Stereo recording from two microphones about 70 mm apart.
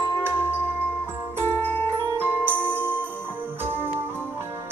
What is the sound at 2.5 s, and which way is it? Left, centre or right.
Music, right.